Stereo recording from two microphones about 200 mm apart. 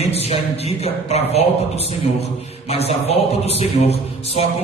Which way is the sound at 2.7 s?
30° left (ahead or behind).